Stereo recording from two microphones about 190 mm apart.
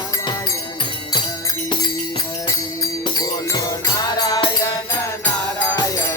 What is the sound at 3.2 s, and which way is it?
Music, 20° left (ahead or behind).